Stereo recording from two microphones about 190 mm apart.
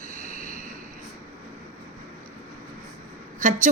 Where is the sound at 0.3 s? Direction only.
35° left (ahead or behind).